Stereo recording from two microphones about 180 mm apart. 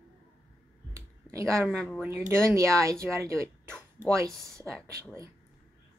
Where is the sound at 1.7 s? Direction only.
5° left (ahead or behind).